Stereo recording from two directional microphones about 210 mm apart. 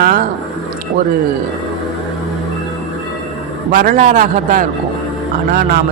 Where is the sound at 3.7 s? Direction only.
40° right (ahead or behind).